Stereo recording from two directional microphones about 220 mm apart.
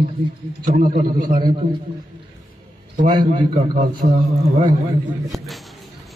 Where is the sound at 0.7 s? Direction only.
35° right (ahead or behind).